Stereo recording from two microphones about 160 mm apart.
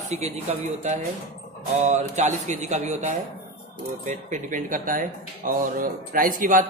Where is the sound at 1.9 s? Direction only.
45° right (ahead or behind).